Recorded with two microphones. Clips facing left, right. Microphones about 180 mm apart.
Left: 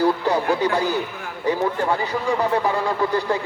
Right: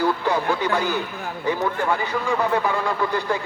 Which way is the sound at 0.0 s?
35° left (ahead or behind).